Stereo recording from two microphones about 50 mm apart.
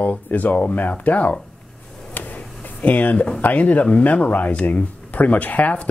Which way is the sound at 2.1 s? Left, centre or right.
Left.